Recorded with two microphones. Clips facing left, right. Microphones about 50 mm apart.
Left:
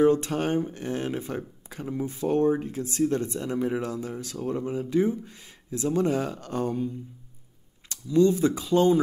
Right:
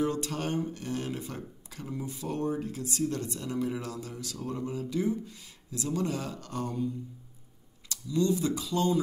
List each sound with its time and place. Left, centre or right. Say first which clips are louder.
0.0 s speech: left 9 dB; left
7.9 s speech: left 7 dB; left